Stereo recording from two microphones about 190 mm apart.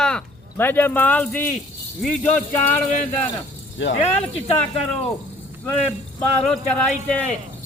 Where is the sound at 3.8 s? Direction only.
75° left (ahead or behind).